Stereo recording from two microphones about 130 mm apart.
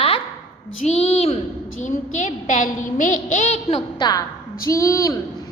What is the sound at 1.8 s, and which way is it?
A woman's voice, 70° left (ahead or behind).